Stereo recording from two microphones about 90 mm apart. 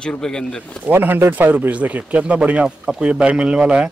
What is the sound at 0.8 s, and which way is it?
Speech, 20° right (ahead or behind).